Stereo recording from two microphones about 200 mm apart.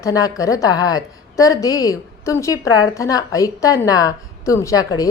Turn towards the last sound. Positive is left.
turn(degrees=15)  # may be behind; listen again after turning